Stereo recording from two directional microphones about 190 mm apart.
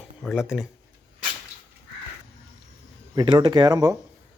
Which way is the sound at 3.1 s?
25° right (ahead or behind).